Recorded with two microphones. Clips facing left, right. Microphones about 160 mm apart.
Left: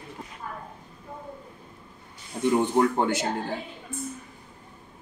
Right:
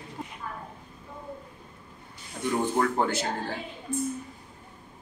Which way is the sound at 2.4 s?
30° left (ahead or behind).